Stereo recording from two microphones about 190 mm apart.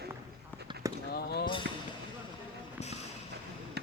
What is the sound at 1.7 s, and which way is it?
Basketball bounce, 65° right (ahead or behind).